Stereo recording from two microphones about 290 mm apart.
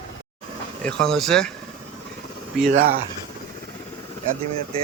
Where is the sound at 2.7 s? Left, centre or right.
Right.